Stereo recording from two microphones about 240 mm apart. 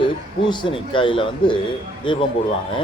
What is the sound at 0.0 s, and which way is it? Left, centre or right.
Speech, centre.